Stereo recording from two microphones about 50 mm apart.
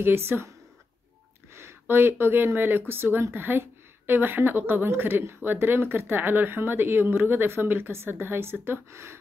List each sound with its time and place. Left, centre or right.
0.0 s speech: right
1.5 s a woman's voice: right